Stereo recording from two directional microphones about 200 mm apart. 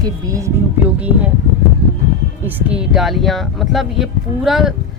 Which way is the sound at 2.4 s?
10° right (ahead or behind).